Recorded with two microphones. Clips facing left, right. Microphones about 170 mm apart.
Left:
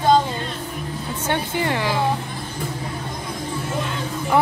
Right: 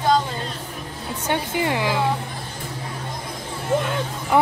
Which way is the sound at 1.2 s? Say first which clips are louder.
Even; 15° right (ahead or behind).